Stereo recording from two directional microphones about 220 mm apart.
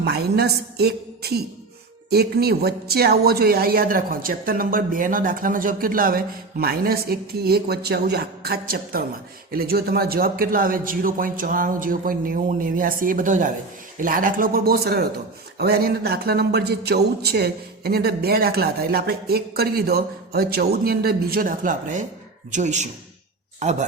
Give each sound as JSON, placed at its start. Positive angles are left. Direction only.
{"t": 0.0, "sound": "a man's voice", "side_deg": -45}